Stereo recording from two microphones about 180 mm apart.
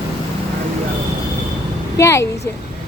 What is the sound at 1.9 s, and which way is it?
Speech, 15° left (ahead or behind).